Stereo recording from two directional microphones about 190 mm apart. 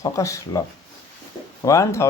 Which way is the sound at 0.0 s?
15° left (ahead or behind).